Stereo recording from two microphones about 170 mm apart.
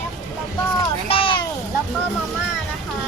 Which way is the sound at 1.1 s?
30° left (ahead or behind).